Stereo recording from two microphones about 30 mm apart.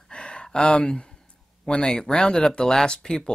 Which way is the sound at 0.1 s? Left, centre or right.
Left.